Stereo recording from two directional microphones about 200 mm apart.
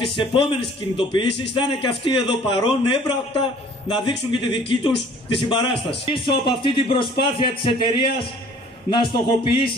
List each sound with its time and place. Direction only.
0.0 s speech: 25° left (ahead or behind)